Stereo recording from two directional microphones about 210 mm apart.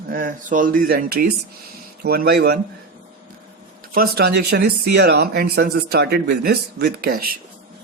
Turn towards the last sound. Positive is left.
turn(degrees=-45)  # may be behind; listen again after turning